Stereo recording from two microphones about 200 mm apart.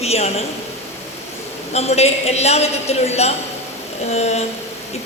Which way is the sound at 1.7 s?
30° left (ahead or behind).